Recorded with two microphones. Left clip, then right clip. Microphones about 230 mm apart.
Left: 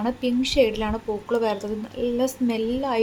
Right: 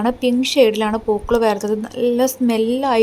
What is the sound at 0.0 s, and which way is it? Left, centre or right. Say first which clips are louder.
A woman's voice: right 7 dB; right.